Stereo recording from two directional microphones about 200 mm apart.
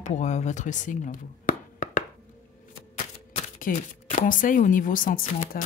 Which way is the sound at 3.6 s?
35° left (ahead or behind).